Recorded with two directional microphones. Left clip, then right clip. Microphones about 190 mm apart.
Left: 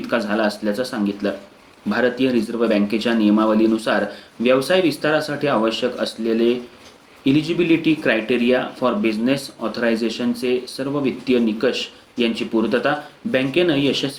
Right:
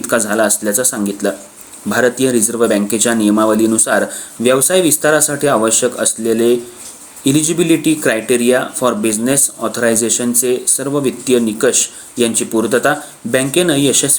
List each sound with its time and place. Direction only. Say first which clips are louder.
0.1 s speech: right 6 dB; 50° right (ahead or behind)